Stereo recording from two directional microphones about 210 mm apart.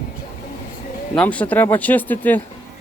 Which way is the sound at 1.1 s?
5° left (ahead or behind).